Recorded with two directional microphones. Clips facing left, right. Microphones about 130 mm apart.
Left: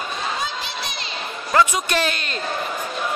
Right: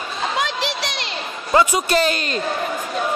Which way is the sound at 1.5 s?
20° right (ahead or behind).